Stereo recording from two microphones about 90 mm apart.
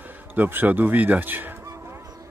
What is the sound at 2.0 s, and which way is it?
Vehicle, 45° right (ahead or behind).